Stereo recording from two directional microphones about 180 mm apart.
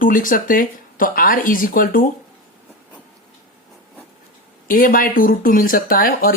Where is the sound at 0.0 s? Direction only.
50° left (ahead or behind).